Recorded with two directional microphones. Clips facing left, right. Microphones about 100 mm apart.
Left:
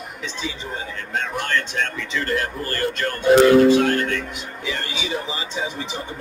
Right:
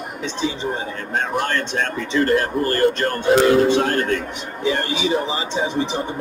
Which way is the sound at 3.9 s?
45° right (ahead or behind).